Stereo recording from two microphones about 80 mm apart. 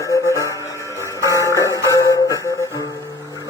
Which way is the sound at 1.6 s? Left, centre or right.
Left.